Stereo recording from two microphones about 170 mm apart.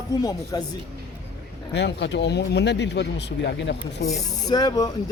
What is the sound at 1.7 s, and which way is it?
Speech, 90° left.